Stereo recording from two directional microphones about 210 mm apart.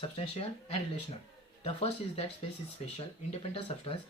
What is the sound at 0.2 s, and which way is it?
Speech, 25° left (ahead or behind).